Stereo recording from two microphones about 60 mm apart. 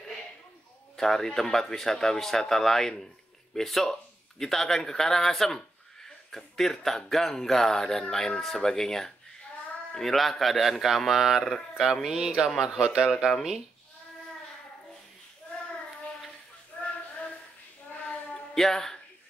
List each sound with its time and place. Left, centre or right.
0.9 s a man's voice: centre
16.8 s a sound: left
18.5 s speech: centre